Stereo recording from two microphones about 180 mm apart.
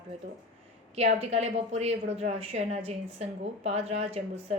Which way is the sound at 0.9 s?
35° right (ahead or behind).